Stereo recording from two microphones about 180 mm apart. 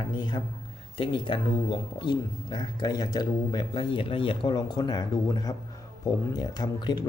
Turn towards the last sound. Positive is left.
turn(degrees=20)  # may be behind; listen again after turning